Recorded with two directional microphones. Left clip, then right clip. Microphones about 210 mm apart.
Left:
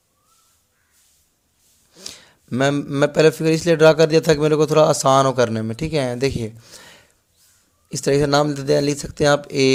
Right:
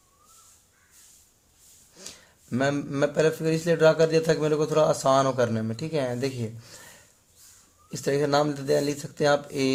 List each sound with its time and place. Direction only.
1.9 s a man's voice: 30° left (ahead or behind)